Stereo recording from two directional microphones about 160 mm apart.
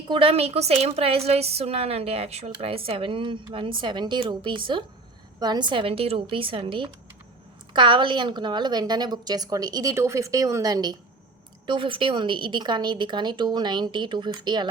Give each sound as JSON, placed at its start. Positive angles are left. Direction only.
{"t": 0.1, "sound": "a woman's voice", "side_deg": -35}